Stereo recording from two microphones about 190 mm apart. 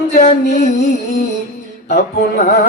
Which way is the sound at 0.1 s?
40° left (ahead or behind).